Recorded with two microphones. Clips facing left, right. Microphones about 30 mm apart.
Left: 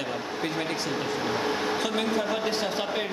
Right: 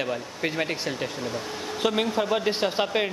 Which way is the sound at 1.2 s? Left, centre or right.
Left.